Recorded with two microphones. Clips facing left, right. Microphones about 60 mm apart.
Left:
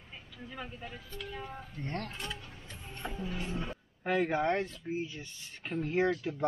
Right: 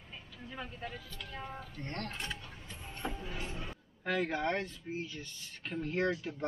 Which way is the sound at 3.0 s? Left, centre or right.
Centre.